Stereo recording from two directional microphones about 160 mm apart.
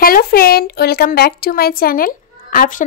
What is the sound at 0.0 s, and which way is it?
A woman's voice, 70° left (ahead or behind).